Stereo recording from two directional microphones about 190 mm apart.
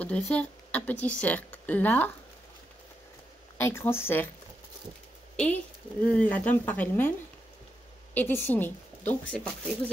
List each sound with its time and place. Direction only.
0.0 s speech: 5° left (ahead or behind)
3.5 s speech: 15° left (ahead or behind)
5.3 s a woman's voice: 5° left (ahead or behind)